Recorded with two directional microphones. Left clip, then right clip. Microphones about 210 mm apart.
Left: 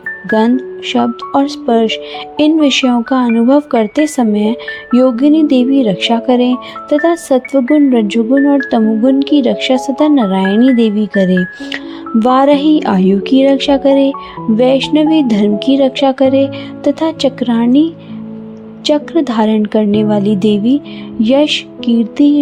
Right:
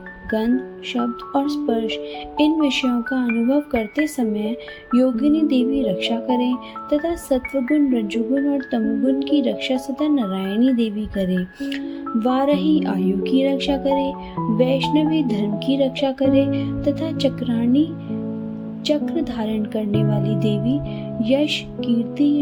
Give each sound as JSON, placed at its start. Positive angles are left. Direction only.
{"t": 0.3, "sound": "speech", "side_deg": 40}